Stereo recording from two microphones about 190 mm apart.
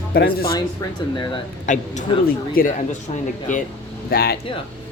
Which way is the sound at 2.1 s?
25° left (ahead or behind).